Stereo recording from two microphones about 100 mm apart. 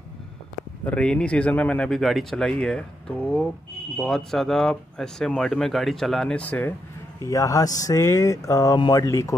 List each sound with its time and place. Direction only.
0.8 s speech: 10° left (ahead or behind)
1.9 s speech: centre (ahead or behind)
7.2 s speech: 35° left (ahead or behind)